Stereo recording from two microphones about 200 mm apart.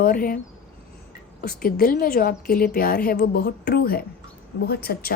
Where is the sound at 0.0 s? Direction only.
45° left (ahead or behind).